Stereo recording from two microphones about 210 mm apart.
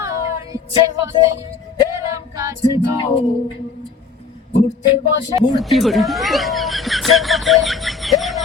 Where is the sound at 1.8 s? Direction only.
15° right (ahead or behind).